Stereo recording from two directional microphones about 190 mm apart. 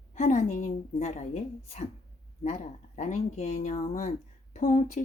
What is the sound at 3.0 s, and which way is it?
Speech, 35° left (ahead or behind).